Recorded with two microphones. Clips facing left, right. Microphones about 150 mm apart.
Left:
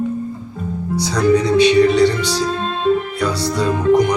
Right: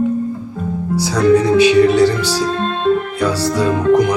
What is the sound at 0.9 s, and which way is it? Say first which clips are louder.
Speech: right 3 dB; 10° right (ahead or behind).